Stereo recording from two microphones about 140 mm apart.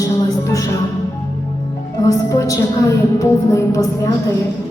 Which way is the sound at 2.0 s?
25° left (ahead or behind).